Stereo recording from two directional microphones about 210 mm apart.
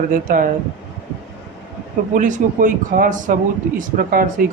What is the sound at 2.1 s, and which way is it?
Speech, 40° right (ahead or behind).